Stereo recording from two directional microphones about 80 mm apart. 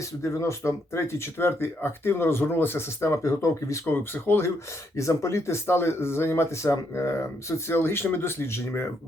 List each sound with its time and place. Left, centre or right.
0.2 s speech: left
3.8 s speech: left